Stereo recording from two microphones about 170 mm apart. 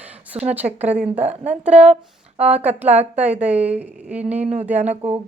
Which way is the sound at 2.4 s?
40° right (ahead or behind).